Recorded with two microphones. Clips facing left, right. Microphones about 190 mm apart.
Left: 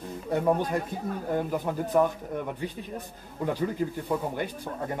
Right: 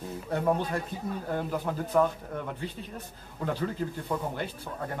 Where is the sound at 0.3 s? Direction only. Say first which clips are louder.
Left 3 dB; 15° left (ahead or behind).